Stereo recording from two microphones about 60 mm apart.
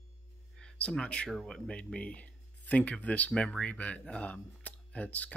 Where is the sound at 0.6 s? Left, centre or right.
Centre.